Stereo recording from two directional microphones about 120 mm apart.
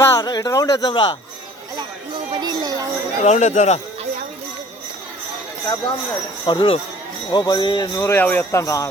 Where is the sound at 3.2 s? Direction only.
85° left.